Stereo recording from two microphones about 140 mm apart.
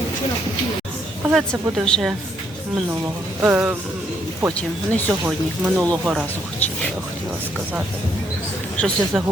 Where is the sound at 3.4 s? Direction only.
15° right (ahead or behind).